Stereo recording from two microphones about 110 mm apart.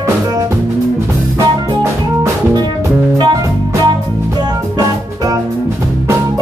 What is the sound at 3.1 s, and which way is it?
Music, 40° right (ahead or behind).